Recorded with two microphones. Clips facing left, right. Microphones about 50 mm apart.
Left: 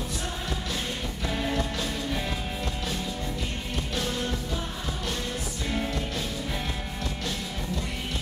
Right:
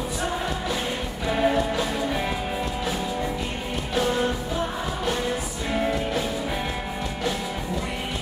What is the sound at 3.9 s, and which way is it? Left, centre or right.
Music, centre.